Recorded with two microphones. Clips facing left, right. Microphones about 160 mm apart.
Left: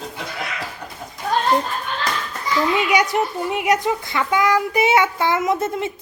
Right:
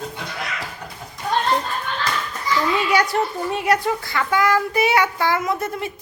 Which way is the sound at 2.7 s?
15° left (ahead or behind).